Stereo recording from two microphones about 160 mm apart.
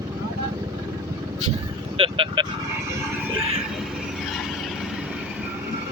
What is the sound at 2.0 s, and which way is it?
Speech, 30° right (ahead or behind).